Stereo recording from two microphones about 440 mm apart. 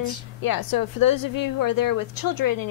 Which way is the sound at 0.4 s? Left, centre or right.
Left.